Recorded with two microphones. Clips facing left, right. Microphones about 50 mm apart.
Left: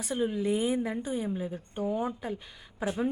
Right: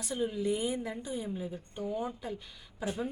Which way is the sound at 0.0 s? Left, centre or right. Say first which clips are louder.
Left 3 dB; left.